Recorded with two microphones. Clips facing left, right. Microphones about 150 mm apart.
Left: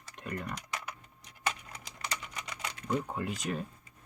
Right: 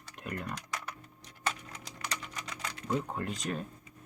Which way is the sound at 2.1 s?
Centre (ahead or behind).